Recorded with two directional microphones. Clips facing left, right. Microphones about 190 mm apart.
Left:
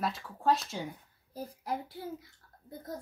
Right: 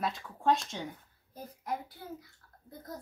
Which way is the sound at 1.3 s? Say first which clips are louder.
Left 1 dB; 30° left (ahead or behind).